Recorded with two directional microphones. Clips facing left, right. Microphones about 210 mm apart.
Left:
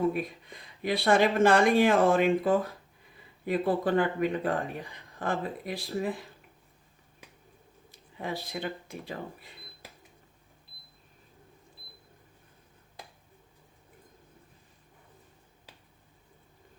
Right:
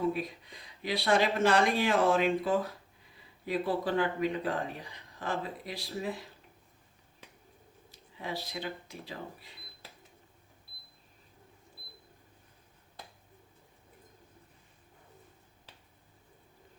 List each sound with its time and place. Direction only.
0.1 s speech: 50° left (ahead or behind)
7.9 s speech: 50° left (ahead or behind)